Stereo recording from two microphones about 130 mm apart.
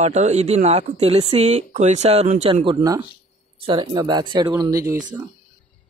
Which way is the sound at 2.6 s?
30° right (ahead or behind).